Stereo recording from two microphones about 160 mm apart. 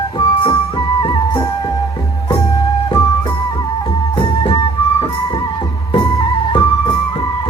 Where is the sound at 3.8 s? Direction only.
30° left (ahead or behind).